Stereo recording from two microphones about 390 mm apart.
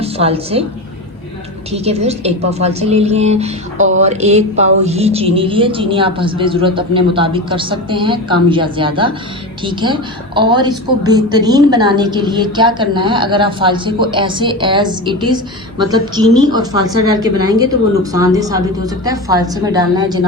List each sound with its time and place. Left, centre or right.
0.0 s a woman's voice: centre
1.7 s a woman's voice: centre